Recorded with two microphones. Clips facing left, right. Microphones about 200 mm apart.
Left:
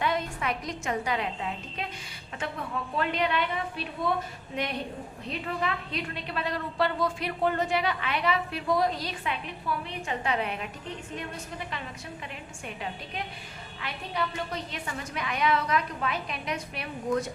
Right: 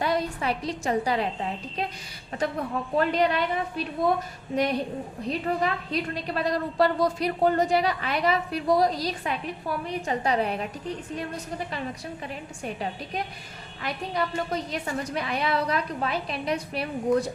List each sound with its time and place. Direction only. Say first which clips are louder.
0.0 s a woman's voice: right 3 dB; 35° right (ahead or behind)
5.3 s a woman's voice: right 5 dB; 40° right (ahead or behind)